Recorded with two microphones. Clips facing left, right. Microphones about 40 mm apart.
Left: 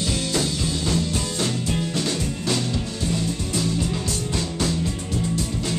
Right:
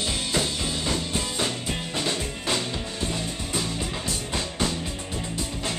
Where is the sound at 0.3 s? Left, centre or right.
Centre.